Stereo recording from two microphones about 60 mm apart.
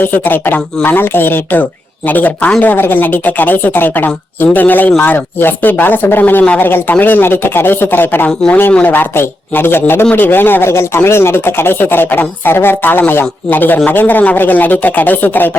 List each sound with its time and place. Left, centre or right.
0.0 s speech: left